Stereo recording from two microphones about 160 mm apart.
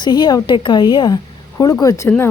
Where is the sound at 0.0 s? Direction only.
25° left (ahead or behind).